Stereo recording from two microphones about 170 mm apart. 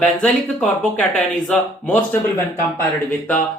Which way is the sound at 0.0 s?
5° left (ahead or behind).